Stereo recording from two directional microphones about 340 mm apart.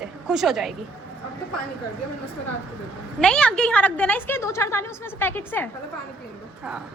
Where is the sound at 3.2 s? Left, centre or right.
Centre.